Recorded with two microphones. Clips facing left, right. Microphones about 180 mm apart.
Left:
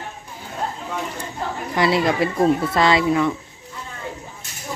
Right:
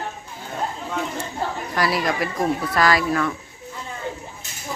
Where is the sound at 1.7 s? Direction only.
25° left (ahead or behind).